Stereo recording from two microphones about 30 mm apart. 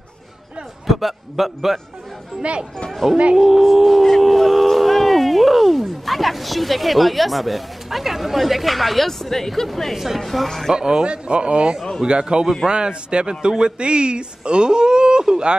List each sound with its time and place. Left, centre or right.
0.8 s a man's voice: centre
3.0 s speech: centre
9.9 s speech: centre
10.3 s speech: centre
10.7 s a man's voice: right